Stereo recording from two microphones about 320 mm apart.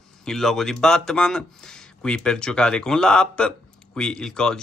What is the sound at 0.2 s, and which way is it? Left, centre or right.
Speech, centre.